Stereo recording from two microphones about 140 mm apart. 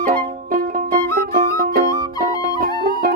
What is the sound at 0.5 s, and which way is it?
Music, 85° right.